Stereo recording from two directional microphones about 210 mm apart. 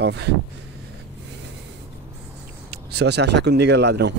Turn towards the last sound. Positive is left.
turn(degrees=-55)  # may be behind; listen again after turning